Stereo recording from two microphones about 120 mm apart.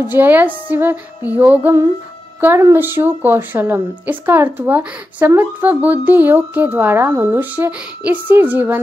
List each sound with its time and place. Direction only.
0.1 s a woman's voice: 15° right (ahead or behind)